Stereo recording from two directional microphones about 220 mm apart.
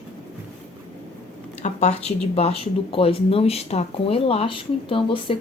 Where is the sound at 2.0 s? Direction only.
30° left (ahead or behind).